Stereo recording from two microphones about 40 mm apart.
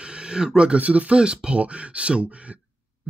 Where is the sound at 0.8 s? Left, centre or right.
Right.